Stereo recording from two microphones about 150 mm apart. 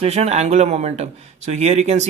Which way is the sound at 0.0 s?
45° right (ahead or behind).